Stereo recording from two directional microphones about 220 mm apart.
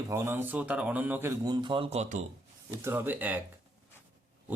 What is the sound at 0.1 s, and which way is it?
Speech, 10° right (ahead or behind).